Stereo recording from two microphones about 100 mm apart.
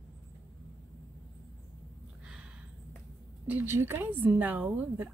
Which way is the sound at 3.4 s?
20° right (ahead or behind).